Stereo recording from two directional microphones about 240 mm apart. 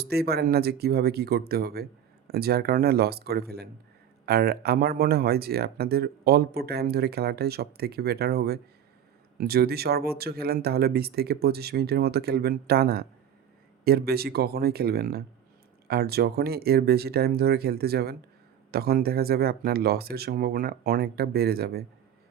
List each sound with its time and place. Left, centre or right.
0.0 s speech: right